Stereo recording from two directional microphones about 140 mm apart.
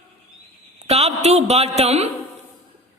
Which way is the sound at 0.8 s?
50° right (ahead or behind).